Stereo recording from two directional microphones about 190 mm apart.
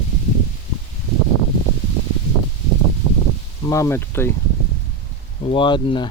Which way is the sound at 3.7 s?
15° left (ahead or behind).